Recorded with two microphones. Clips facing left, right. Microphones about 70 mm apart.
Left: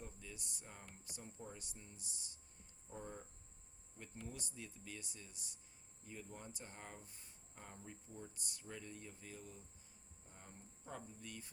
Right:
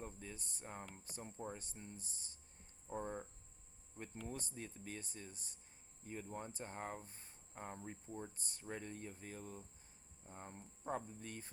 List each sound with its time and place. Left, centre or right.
0.0 s speech: right